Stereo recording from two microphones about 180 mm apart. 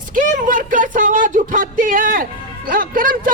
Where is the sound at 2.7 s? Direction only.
50° right (ahead or behind).